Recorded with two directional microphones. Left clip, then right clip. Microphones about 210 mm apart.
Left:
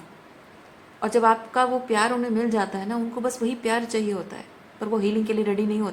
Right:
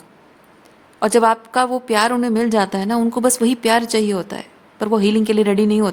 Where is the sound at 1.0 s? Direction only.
50° right (ahead or behind).